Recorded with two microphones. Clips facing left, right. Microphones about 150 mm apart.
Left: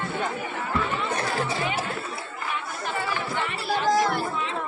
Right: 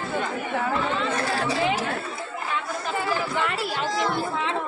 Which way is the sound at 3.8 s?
50° left (ahead or behind).